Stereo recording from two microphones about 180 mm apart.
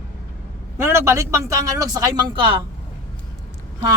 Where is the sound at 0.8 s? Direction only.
15° right (ahead or behind).